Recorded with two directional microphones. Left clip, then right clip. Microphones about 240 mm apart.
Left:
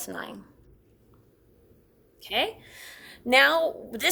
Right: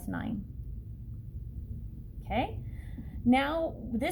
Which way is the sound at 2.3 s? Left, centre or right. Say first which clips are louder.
Left 5 dB; left.